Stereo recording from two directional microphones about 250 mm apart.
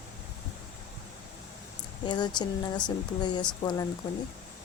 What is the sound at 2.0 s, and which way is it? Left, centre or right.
Speech, centre.